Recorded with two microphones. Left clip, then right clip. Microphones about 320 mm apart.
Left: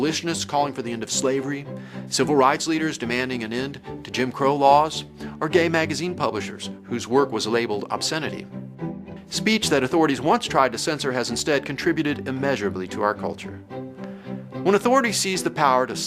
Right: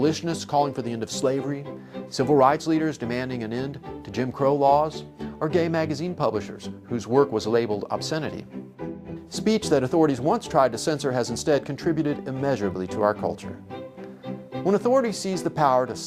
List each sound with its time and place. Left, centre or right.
0.0 s speech: right
14.6 s speech: right